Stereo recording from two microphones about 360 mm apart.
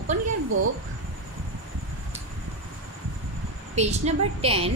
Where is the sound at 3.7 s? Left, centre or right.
Centre.